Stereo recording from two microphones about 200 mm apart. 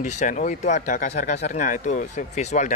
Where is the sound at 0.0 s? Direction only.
35° left (ahead or behind).